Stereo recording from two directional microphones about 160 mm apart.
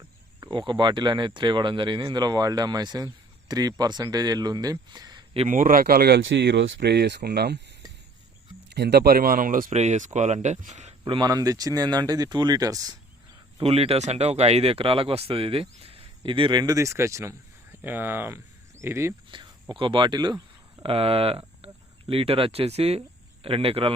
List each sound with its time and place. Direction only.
0.3 s speech: 25° right (ahead or behind)
5.5 s speech: 60° right (ahead or behind); by 7.6 s 90° right
8.7 s speech: 90° right; by 10.9 s 45° right (ahead or behind)
11.0 s speech: 30° right (ahead or behind)
13.6 s speech: 40° right (ahead or behind); by 19.1 s 15° right (ahead or behind)
19.3 s a sound: 30° right (ahead or behind)
19.8 s speech: 30° right (ahead or behind)
20.9 s speech: 40° right (ahead or behind)